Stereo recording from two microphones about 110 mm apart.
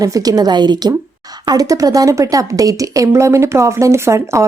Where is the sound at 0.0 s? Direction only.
35° right (ahead or behind).